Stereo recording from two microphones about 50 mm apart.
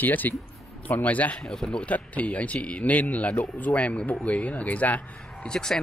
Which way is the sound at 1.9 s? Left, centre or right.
Left.